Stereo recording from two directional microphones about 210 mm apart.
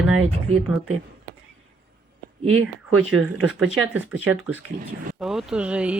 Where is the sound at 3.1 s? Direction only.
Centre (ahead or behind).